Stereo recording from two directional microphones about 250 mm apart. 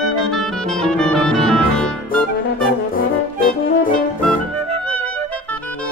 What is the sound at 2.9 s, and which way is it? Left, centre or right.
Brass instrument, left.